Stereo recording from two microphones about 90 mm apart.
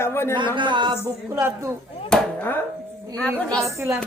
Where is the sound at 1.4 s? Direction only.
25° right (ahead or behind).